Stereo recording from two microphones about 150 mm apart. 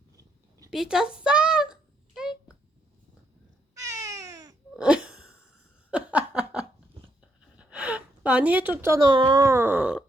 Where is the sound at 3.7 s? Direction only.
20° right (ahead or behind).